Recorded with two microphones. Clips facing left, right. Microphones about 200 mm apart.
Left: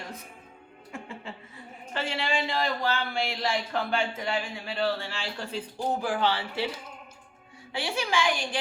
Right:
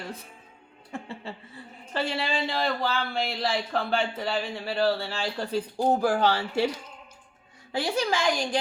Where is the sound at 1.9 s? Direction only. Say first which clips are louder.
Right 1 dB; 35° right (ahead or behind).